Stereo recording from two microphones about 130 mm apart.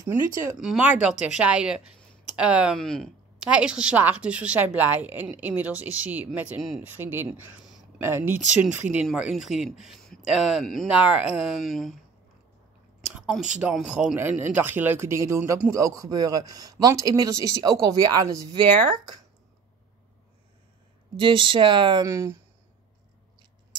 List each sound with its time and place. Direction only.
0.6 s a woman's voice: 5° right (ahead or behind)
2.8 s speech: 5° left (ahead or behind)
3.4 s a woman's voice: 10° right (ahead or behind)
13.1 s a sound: 5° right (ahead or behind)
13.6 s a woman's voice: 10° right (ahead or behind)
14.1 s a woman's voice: 15° right (ahead or behind)
21.2 s speech: 40° right (ahead or behind)
22.0 s a man's voice: 20° right (ahead or behind)